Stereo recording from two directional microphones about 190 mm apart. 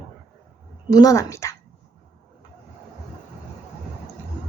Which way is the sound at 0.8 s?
20° left (ahead or behind).